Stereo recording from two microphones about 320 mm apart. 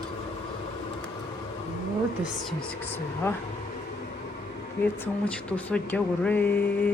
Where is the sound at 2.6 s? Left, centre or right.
Centre.